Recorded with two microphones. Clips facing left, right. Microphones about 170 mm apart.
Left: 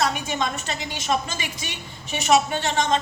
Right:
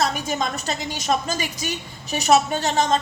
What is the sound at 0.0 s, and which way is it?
A woman's voice, 40° right (ahead or behind).